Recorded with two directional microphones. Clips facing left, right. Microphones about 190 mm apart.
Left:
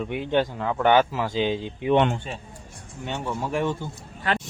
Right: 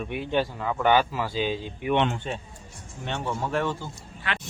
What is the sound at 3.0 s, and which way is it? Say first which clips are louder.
Speech: left 1 dB; 10° left (ahead or behind).